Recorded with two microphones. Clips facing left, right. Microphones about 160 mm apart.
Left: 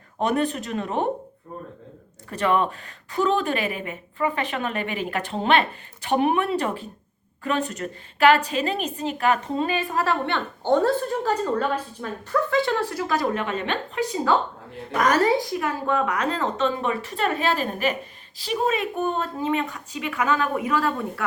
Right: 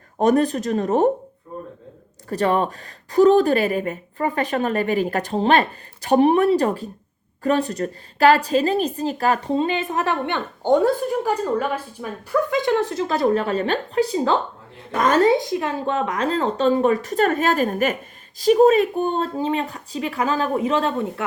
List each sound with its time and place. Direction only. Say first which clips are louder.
0.2 s speech: right 6 dB; 40° right (ahead or behind)
2.3 s a woman's voice: right 2 dB; 35° right (ahead or behind)